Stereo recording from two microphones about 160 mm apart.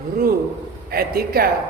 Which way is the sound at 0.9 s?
75° right (ahead or behind).